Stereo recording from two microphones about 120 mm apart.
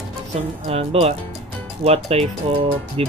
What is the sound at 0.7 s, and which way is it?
Speech, 60° right (ahead or behind).